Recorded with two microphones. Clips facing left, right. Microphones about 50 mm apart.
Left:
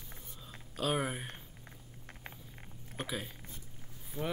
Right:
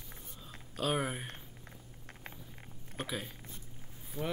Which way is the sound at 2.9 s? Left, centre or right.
Centre.